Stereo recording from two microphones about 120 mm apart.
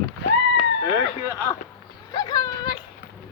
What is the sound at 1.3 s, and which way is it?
Speech, 25° left (ahead or behind).